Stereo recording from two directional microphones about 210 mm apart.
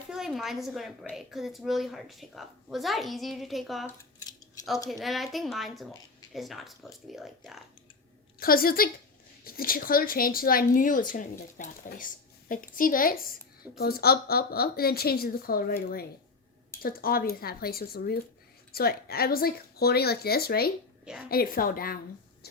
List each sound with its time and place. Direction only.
0.1 s a woman's voice: centre (ahead or behind)
3.8 s scissors: 15° left (ahead or behind)
4.9 s a woman's voice: centre (ahead or behind)
8.4 s a woman's voice: 45° left (ahead or behind)